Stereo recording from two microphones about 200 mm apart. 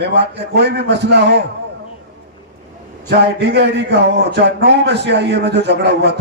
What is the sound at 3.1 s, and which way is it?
Speech, 60° right (ahead or behind).